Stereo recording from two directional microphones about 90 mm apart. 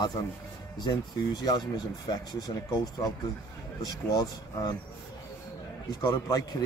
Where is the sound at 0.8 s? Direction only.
55° left (ahead or behind).